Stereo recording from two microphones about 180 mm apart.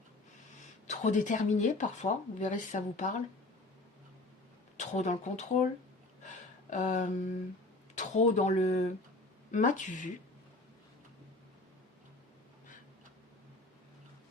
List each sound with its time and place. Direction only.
0.9 s speech: 40° left (ahead or behind)
4.8 s speech: 40° left (ahead or behind)
6.2 s a sound: 40° left (ahead or behind)
7.9 s speech: 40° left (ahead or behind)